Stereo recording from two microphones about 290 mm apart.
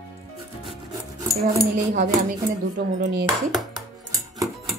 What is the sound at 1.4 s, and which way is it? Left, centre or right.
Speech, right.